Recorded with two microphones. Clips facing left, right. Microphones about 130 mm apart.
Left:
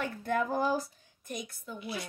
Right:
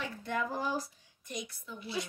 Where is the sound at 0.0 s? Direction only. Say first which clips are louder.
Left 4 dB; 45° left (ahead or behind).